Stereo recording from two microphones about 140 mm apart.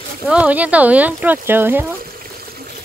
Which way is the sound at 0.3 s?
10° right (ahead or behind).